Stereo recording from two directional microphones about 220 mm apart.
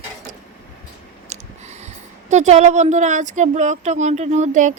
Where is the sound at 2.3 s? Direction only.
30° right (ahead or behind).